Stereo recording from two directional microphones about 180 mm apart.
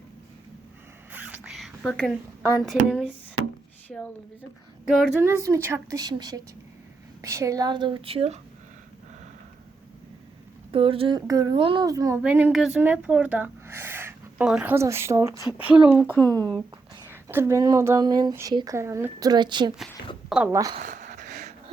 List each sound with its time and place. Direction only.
1.1 s whispering: 10° right (ahead or behind)
2.6 s speech: centre (ahead or behind)
5.2 s speech: 15° right (ahead or behind); by 8.4 s 35° right (ahead or behind)
10.7 s speech: 30° right (ahead or behind)
11.3 s speech: 20° right (ahead or behind)
12.2 s speech: 5° right (ahead or behind)
16.0 s speech: 10° left (ahead or behind)
17.1 s speech: 15° right (ahead or behind)
20.7 s a sound: 45° right (ahead or behind)